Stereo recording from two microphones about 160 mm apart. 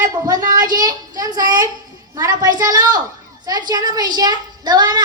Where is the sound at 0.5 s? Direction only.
25° right (ahead or behind).